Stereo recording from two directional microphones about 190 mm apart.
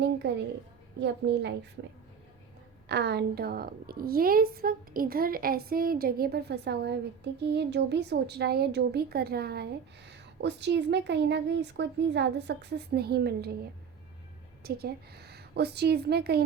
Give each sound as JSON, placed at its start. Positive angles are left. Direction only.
{"t": 0.2, "sound": "a woman's voice", "side_deg": -60}
{"t": 14.6, "sound": "a woman's voice", "side_deg": -55}